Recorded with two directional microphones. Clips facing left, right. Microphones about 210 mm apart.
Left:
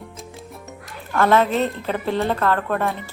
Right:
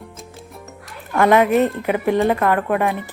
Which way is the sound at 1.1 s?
15° right (ahead or behind).